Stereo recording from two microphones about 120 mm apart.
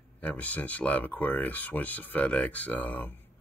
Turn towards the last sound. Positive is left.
turn(degrees=15)  # may be behind; listen again after turning